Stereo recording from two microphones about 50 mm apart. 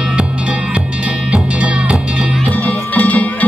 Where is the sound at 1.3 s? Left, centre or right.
Right.